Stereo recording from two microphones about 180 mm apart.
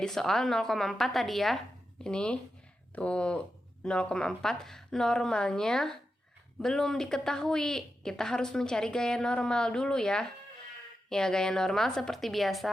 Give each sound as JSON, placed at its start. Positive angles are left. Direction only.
{"t": 0.0, "sound": "a woman's voice", "side_deg": 0}